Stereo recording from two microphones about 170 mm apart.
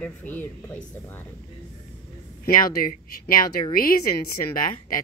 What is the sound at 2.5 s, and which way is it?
A woman's voice, 50° left (ahead or behind).